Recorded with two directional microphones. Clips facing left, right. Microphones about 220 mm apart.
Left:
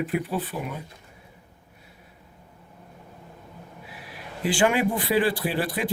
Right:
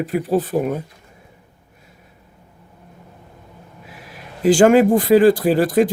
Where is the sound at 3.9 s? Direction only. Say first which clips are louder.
Right 3 dB; 45° right (ahead or behind).